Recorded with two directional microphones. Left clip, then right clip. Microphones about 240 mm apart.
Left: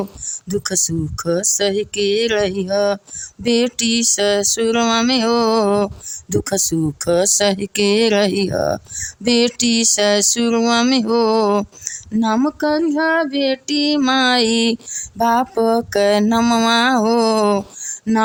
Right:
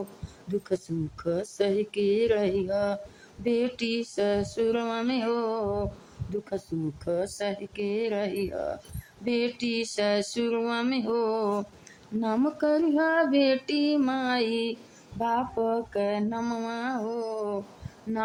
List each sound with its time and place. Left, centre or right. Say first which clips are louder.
0.4 s speech: left 9 dB; left